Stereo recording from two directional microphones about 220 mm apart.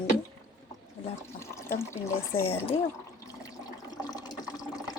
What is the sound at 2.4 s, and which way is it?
Speech, 25° left (ahead or behind).